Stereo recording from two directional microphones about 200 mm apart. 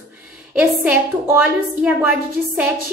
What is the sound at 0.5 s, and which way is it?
A woman's voice, 5° right (ahead or behind).